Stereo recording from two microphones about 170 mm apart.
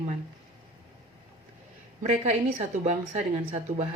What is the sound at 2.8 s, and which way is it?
Speech, 45° right (ahead or behind).